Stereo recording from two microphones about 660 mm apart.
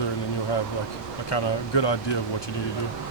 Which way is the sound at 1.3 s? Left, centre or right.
Left.